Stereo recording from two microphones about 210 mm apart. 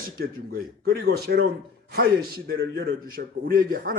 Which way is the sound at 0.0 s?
45° right (ahead or behind).